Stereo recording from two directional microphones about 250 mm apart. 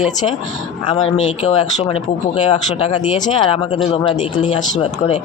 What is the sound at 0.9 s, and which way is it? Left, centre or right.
Speech, left.